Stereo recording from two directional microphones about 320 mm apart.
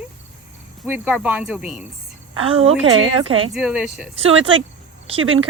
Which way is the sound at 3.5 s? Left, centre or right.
Centre.